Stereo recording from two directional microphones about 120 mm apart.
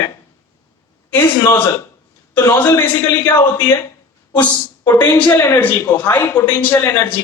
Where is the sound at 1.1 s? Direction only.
15° left (ahead or behind).